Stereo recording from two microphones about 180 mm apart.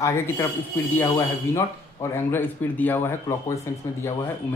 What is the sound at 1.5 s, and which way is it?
Speech, 15° left (ahead or behind).